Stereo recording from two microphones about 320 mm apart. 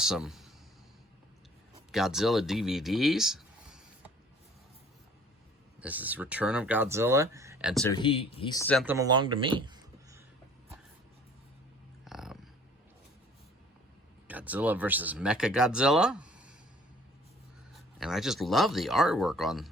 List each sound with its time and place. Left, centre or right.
0.0 s speech: centre
1.9 s speech: centre
5.8 s speech: centre
7.9 s speech: centre
9.0 s a sound: centre
12.0 s dog: centre
14.3 s speech: centre
17.7 s speech: centre